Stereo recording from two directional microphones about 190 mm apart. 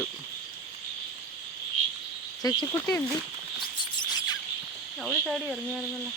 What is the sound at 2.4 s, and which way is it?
Speech, 20° left (ahead or behind).